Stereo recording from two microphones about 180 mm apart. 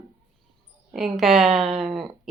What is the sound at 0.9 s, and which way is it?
Speech, centre (ahead or behind).